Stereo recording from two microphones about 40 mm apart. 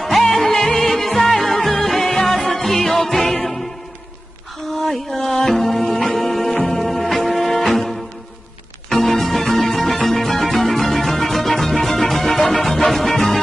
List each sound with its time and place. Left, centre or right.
0.0 s music: centre
4.7 s music: centre